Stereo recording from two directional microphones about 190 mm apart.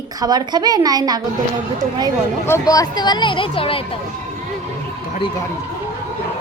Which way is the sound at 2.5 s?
15° left (ahead or behind).